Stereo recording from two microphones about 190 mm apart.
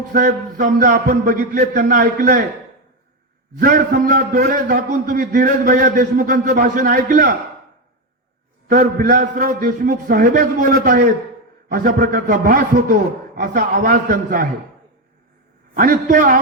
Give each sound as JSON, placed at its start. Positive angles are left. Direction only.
{"t": 0.1, "sound": "a man's voice", "side_deg": -45}
{"t": 3.6, "sound": "a man's voice", "side_deg": -55}
{"t": 8.7, "sound": "a man's voice", "side_deg": -45}
{"t": 15.7, "sound": "a man's voice", "side_deg": -45}